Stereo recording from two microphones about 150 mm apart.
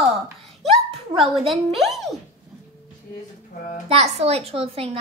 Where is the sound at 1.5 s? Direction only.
Centre (ahead or behind).